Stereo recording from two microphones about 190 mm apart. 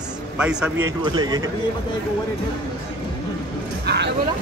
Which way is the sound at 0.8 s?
20° right (ahead or behind).